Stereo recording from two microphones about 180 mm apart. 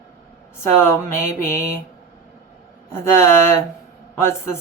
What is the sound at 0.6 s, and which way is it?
Speech, 15° left (ahead or behind).